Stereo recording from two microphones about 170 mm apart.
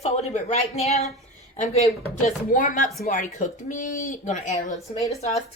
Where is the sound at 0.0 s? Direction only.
40° left (ahead or behind).